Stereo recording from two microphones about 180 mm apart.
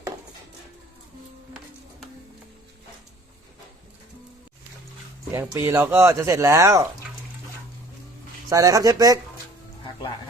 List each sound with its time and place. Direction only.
5.3 s speech: 15° right (ahead or behind)
8.4 s speech: 15° right (ahead or behind)